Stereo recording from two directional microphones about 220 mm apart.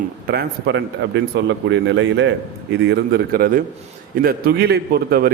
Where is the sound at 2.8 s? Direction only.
45° right (ahead or behind).